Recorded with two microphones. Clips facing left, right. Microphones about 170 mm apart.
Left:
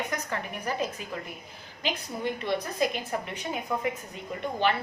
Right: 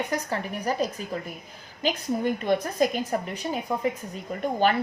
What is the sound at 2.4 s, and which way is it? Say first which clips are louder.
A woman's voice: right 3 dB; 45° right (ahead or behind).